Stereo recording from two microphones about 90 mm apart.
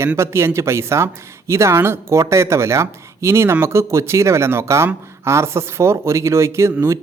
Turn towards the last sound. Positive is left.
turn(degrees=-35)  # may be behind; listen again after turning